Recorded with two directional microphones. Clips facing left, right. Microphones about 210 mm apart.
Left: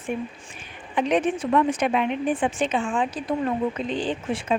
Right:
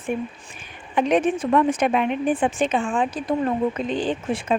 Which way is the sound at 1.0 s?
45° right (ahead or behind).